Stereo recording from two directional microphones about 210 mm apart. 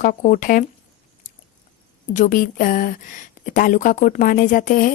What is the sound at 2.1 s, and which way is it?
Speech, 40° left (ahead or behind).